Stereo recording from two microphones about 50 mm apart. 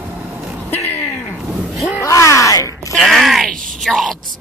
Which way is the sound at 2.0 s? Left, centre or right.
Left.